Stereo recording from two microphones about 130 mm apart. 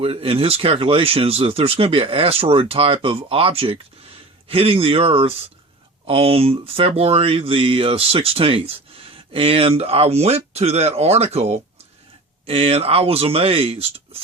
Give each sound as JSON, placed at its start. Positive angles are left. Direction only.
{"t": 0.0, "sound": "speech", "side_deg": -45}